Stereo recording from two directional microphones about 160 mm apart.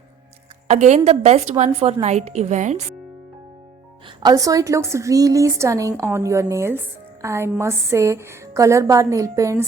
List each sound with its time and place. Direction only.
0.7 s a woman's voice: 45° right (ahead or behind)
4.2 s a woman's voice: 25° right (ahead or behind)